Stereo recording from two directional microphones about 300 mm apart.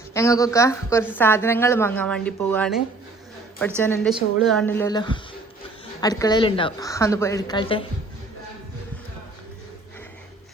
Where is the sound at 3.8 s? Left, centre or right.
Centre.